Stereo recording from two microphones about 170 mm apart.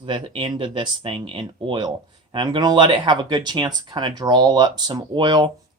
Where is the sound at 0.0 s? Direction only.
30° right (ahead or behind).